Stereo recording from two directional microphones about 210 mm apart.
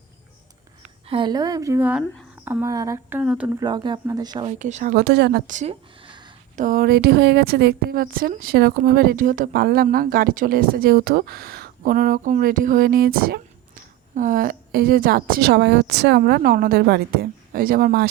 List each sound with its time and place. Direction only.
1.0 s speech: 25° right (ahead or behind); by 3.6 s 5° right (ahead or behind)
3.6 s speech: 20° right (ahead or behind)
4.5 s a woman's voice: 35° right (ahead or behind); by 5.4 s 50° right (ahead or behind)
5.5 s a sound: 35° right (ahead or behind)
6.6 s a woman's voice: 40° right (ahead or behind)